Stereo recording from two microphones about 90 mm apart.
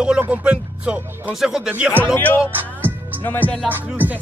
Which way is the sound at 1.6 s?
15° right (ahead or behind).